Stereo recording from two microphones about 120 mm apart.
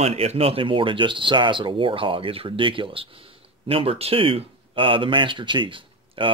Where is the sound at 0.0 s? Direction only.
60° right (ahead or behind).